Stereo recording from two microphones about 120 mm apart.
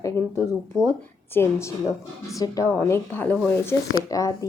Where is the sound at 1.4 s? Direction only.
20° left (ahead or behind).